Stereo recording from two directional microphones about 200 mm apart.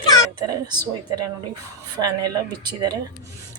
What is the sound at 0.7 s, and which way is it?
Speech, 20° right (ahead or behind).